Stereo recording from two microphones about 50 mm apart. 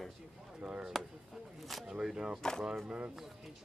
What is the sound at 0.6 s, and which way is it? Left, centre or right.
Speech, centre.